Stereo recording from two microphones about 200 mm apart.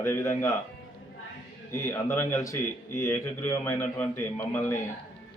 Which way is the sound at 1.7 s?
15° left (ahead or behind).